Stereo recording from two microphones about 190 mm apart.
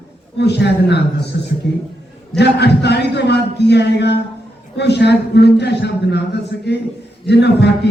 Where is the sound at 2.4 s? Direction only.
60° left (ahead or behind).